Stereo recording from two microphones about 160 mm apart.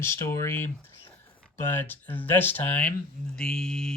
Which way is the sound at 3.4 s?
5° left (ahead or behind).